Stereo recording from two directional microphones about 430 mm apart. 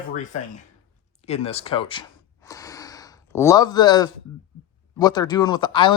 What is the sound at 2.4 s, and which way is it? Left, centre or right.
Gasp, centre.